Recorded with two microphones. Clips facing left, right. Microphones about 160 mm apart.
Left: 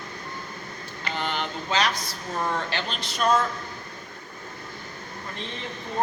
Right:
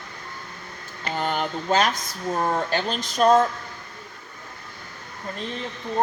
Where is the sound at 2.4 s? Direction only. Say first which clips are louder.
Right 4 dB; 45° right (ahead or behind).